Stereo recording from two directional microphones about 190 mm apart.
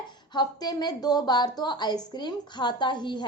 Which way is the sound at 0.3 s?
20° left (ahead or behind).